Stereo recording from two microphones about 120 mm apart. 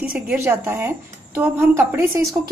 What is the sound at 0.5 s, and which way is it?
A woman's voice, 20° right (ahead or behind).